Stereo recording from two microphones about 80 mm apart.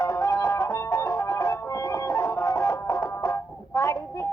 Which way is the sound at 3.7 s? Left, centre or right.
Left.